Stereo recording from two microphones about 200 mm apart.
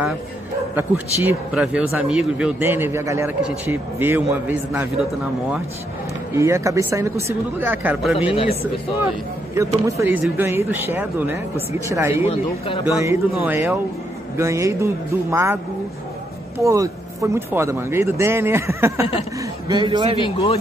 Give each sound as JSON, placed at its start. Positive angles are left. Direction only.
{"t": 0.7, "sound": "speech", "side_deg": -10}
{"t": 6.4, "sound": "speech", "side_deg": -15}
{"t": 8.3, "sound": "speech", "side_deg": 25}
{"t": 9.8, "sound": "speech", "side_deg": -15}
{"t": 12.3, "sound": "speech", "side_deg": 25}
{"t": 12.8, "sound": "a man's voice", "side_deg": -15}
{"t": 20.2, "sound": "speech", "side_deg": 25}